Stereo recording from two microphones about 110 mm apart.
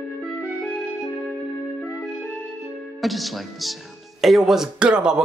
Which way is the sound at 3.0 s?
Centre (ahead or behind).